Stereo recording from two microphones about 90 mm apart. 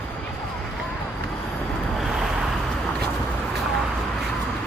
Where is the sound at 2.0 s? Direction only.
5° right (ahead or behind).